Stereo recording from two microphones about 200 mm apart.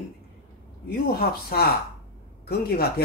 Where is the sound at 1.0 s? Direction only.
50° left (ahead or behind).